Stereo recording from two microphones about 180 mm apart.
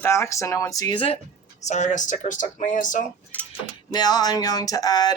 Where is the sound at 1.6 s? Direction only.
40° left (ahead or behind).